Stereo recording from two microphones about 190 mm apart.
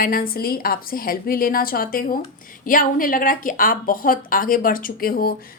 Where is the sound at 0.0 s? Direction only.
50° left (ahead or behind).